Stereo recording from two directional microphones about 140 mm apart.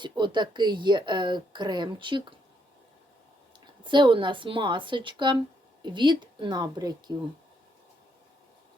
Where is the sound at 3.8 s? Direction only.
35° right (ahead or behind).